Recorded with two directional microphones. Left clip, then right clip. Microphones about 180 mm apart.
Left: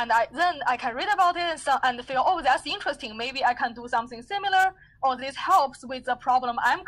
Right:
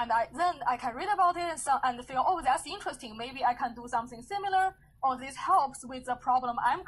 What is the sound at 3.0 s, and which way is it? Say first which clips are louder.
A woman's voice: left 3 dB; 30° left (ahead or behind).